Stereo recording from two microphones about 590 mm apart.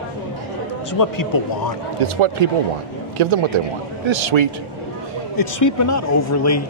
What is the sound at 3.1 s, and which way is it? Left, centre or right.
A man's voice, right.